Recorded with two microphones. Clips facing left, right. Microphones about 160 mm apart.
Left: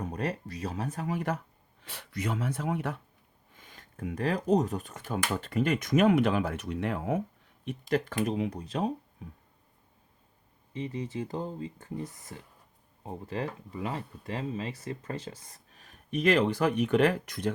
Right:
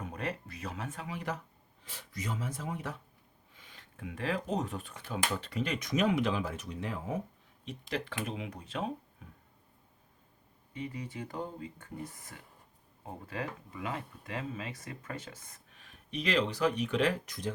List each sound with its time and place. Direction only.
0.0 s speech: 40° left (ahead or behind)
1.8 s speech: 65° left (ahead or behind)
3.5 s speech: 45° left (ahead or behind); by 7.2 s 65° left (ahead or behind)
7.6 s speech: 50° left (ahead or behind)
10.8 s speech: 25° left (ahead or behind)
13.2 s speech: 30° left (ahead or behind); by 17.5 s 60° left (ahead or behind)